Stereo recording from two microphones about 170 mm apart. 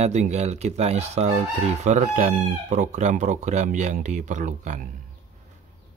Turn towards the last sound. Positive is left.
turn(degrees=-45)  # may be behind; listen again after turning